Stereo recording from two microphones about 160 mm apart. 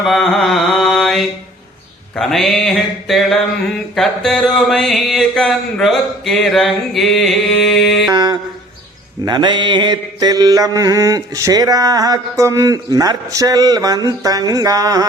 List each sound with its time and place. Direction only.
0.0 s mantra: centre (ahead or behind)
8.1 s mantra: 25° right (ahead or behind)